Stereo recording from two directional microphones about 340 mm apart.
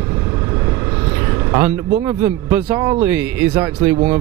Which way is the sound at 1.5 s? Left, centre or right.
Centre.